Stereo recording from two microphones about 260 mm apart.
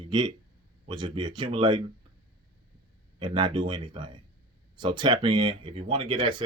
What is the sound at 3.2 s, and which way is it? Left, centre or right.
Speech, centre.